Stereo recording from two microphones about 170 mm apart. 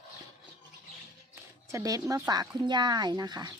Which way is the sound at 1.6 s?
15° right (ahead or behind).